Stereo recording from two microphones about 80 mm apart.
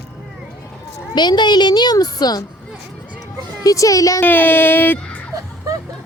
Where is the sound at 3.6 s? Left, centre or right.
Left.